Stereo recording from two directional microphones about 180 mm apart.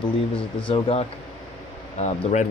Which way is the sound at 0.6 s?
30° left (ahead or behind).